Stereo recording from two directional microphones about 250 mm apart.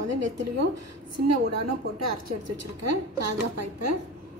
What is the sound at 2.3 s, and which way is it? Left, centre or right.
A woman's voice, right.